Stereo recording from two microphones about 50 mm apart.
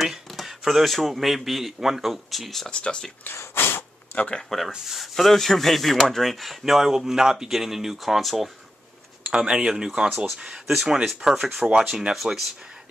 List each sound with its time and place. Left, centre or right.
0.0 s speech: centre
2.8 s speech: centre
3.5 s snort: left
4.3 s speech: centre
9.3 s speech: centre
10.7 s speech: centre
11.7 s speech: centre